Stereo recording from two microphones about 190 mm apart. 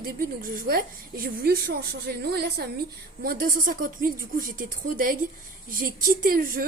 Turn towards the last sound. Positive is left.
turn(degrees=-50)  # may be behind; listen again after turning